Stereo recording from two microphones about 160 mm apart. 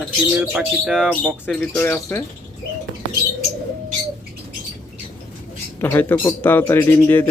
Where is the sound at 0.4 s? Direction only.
5° right (ahead or behind).